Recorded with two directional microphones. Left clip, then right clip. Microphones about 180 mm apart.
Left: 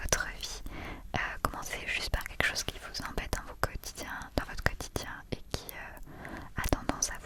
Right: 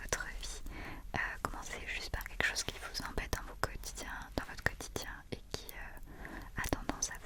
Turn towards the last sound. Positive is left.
turn(degrees=40)  # may be behind; listen again after turning